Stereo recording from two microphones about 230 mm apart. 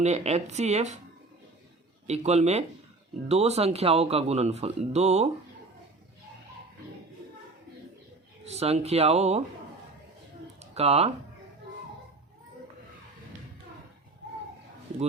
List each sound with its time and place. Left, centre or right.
0.0 s speech: right
2.0 s speech: right
8.4 s speech: right
10.6 s a sound: right